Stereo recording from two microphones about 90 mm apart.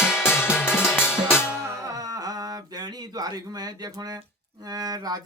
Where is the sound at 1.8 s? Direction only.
40° right (ahead or behind).